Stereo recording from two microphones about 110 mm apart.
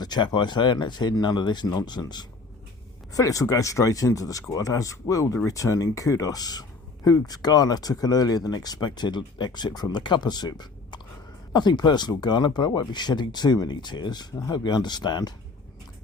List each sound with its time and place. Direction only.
0.0 s speech: 40° left (ahead or behind)